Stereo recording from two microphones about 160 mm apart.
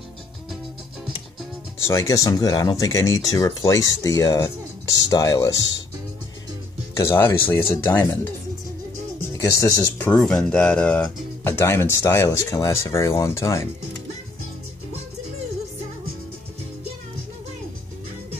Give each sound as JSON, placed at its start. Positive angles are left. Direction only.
{"t": 1.8, "sound": "speech", "side_deg": 20}
{"t": 7.0, "sound": "speech", "side_deg": 15}
{"t": 9.4, "sound": "speech", "side_deg": 20}